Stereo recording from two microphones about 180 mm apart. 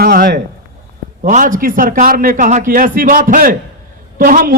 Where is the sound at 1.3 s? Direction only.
45° right (ahead or behind).